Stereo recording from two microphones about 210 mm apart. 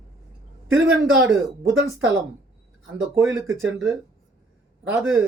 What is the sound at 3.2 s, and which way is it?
Speech, 15° right (ahead or behind).